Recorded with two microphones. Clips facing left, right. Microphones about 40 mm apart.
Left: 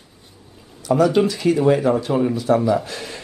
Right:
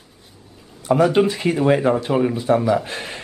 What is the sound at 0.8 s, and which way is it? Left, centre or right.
Speech, right.